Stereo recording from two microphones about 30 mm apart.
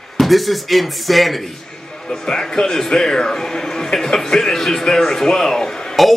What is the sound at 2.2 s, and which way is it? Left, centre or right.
A man's voice, left.